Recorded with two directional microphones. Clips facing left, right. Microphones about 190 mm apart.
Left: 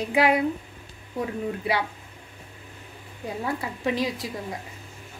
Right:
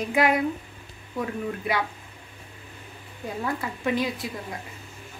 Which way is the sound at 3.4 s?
30° left (ahead or behind).